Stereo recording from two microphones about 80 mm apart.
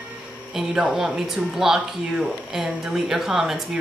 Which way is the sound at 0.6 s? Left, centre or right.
Centre.